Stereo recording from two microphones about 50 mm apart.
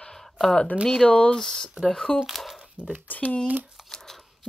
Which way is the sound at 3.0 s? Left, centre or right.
Left.